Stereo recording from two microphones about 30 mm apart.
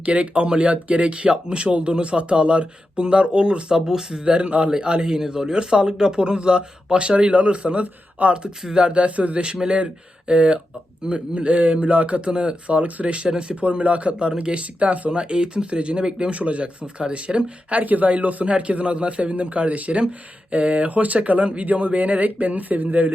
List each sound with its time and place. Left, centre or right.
0.0 s speech: right
1.6 s speech: right
5.0 s speech: right
9.4 s speech: right
12.7 s speech: right
14.2 s speech: right
15.1 s speech: right
16.3 s speech: right
17.8 s speech: right
22.4 s speech: right